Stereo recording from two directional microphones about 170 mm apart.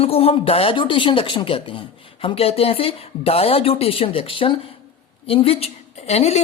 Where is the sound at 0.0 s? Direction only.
35° left (ahead or behind).